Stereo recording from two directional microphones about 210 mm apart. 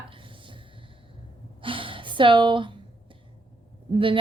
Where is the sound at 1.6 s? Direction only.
25° right (ahead or behind).